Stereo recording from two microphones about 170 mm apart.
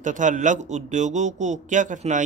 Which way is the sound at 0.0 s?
45° right (ahead or behind).